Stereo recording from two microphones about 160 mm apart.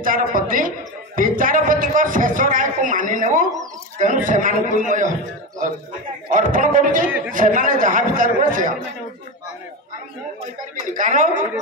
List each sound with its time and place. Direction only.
0.0 s speech: 60° right (ahead or behind)
0.5 s a sound: 60° right (ahead or behind)
4.0 s a man's voice: 55° right (ahead or behind)
6.3 s a man's voice: 55° right (ahead or behind)
10.9 s a man's voice: 55° right (ahead or behind)